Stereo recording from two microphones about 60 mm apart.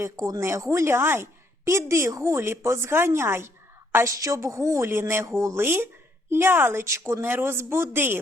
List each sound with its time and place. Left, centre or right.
0.3 s a woman's voice: right
1.6 s a woman's voice: right
4.0 s a woman's voice: right
5.6 s a man's voice: right